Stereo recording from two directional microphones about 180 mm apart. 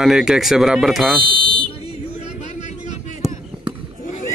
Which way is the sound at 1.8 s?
40° left (ahead or behind).